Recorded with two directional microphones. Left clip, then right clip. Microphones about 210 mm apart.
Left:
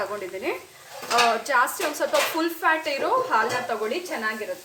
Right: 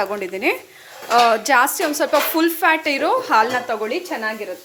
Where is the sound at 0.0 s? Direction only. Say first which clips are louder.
Right 8 dB; 45° right (ahead or behind).